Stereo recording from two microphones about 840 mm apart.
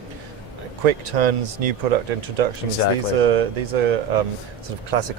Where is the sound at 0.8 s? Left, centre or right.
Right.